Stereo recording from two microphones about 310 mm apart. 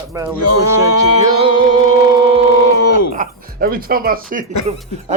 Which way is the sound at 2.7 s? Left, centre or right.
Left.